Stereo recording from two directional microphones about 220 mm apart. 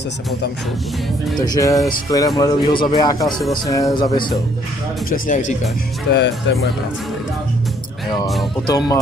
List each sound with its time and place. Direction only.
1.4 s speech: 15° left (ahead or behind)
5.1 s speech: 35° left (ahead or behind)
6.1 s speech: 50° left (ahead or behind)
8.6 s speech: 20° left (ahead or behind)